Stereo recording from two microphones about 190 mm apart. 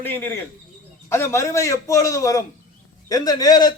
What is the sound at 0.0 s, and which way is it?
A man's voice, 10° left (ahead or behind).